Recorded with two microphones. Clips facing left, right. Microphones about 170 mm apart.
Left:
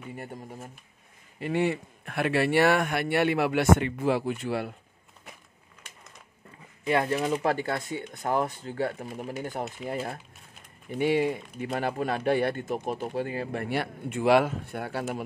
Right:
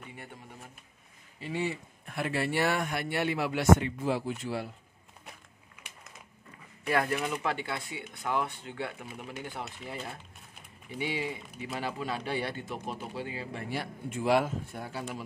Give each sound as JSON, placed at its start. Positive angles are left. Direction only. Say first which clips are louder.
{"t": 0.1, "sound": "speech", "louder": "left 8 dB", "side_deg": 45}
{"t": 1.4, "sound": "speech", "louder": "left 7 dB", "side_deg": 60}
{"t": 6.9, "sound": "speech", "louder": "left 4 dB", "side_deg": 25}